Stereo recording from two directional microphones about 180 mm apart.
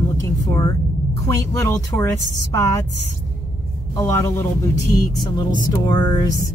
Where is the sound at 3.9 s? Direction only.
15° left (ahead or behind).